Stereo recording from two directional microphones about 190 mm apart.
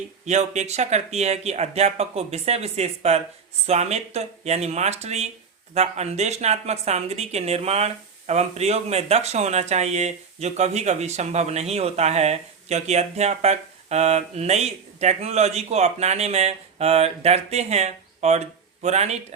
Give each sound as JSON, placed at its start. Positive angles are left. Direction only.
{"t": 0.3, "sound": "speech", "side_deg": -35}